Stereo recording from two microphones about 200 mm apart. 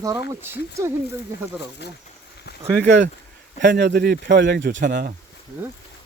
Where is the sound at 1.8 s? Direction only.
55° left (ahead or behind).